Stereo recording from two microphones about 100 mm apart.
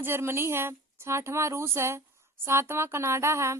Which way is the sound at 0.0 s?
25° right (ahead or behind).